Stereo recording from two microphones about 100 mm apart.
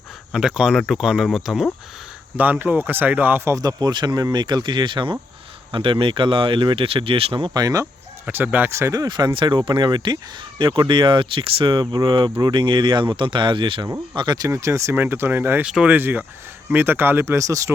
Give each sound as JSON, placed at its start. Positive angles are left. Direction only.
{"t": 0.3, "sound": "speech", "side_deg": -5}
{"t": 2.3, "sound": "speech", "side_deg": -20}
{"t": 3.5, "sound": "speech", "side_deg": -40}
{"t": 7.5, "sound": "speech", "side_deg": -35}
{"t": 8.3, "sound": "speech", "side_deg": -20}
{"t": 8.7, "sound": "speech", "side_deg": -30}
{"t": 11.8, "sound": "speech", "side_deg": -45}
{"t": 14.2, "sound": "speech", "side_deg": -40}
{"t": 14.5, "sound": "speech", "side_deg": -30}
{"t": 15.6, "sound": "speech", "side_deg": -10}
{"t": 16.0, "sound": "speech", "side_deg": -20}